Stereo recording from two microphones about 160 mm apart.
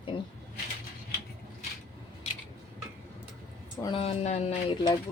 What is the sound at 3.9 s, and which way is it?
Speech, 40° left (ahead or behind).